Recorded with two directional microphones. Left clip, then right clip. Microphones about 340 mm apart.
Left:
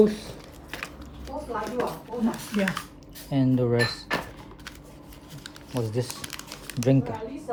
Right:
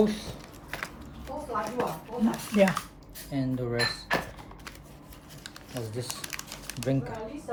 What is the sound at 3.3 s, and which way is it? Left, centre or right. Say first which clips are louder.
Speech: left 6 dB; centre.